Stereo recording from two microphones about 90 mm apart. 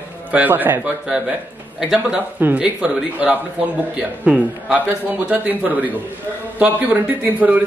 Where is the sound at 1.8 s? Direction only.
5° right (ahead or behind).